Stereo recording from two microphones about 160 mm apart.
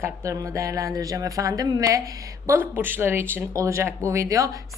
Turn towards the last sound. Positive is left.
turn(degrees=-20)  # may be behind; listen again after turning